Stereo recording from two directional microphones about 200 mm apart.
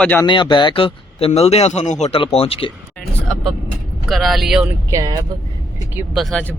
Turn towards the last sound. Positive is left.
turn(degrees=0)  # may be behind; listen again after turning